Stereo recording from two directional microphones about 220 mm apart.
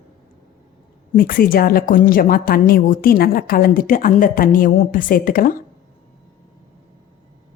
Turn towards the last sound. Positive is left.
turn(degrees=40)  # may be behind; listen again after turning